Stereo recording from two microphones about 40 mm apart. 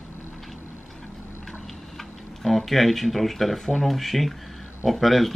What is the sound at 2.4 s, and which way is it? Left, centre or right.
Speech, centre.